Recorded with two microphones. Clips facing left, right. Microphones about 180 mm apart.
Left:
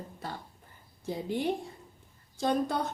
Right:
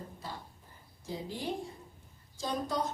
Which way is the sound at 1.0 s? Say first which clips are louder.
Left 6 dB; 60° left (ahead or behind).